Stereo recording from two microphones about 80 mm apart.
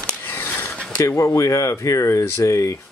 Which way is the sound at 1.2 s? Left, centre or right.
Left.